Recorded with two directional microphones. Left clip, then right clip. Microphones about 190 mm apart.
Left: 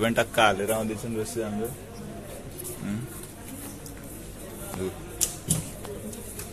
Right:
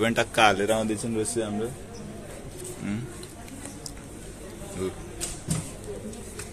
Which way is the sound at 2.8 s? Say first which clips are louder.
Right 2 dB; 5° right (ahead or behind).